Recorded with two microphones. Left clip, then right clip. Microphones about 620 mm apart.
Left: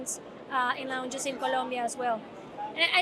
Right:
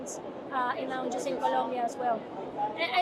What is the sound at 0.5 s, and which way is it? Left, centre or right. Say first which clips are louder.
A woman's voice: left 2 dB; left.